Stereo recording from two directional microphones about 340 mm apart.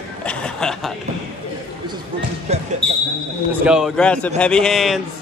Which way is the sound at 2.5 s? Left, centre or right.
Centre.